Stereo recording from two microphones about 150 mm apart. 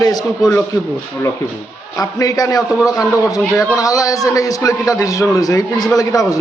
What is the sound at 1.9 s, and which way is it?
A man's voice, 25° left (ahead or behind).